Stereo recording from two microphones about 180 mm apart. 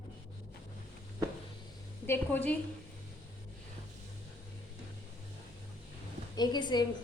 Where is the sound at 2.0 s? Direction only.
10° left (ahead or behind).